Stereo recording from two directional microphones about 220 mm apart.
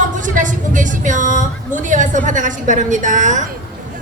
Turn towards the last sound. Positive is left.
turn(degrees=-35)  # may be behind; listen again after turning